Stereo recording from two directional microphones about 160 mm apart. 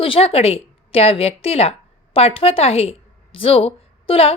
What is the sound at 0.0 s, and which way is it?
A woman's voice, 35° left (ahead or behind).